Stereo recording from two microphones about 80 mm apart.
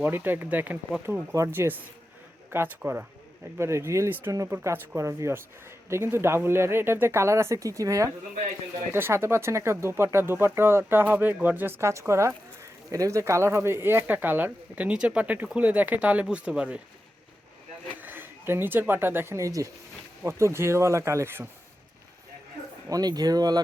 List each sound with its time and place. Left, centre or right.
0.0 s speech: right
3.6 s speech: right
8.9 s speech: right
16.2 s speech: centre
18.0 s speech: right
22.9 s speech: right